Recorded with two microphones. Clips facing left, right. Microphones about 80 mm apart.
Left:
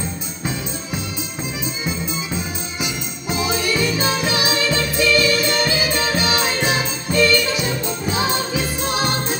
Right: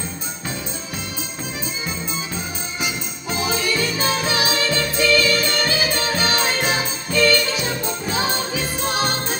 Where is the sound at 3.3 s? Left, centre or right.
Right.